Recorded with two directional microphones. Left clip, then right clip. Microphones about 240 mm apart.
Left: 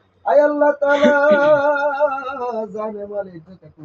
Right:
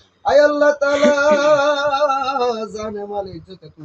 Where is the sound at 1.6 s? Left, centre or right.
Right.